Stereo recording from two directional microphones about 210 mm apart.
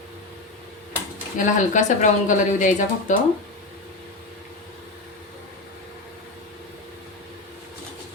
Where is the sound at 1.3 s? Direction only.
35° left (ahead or behind).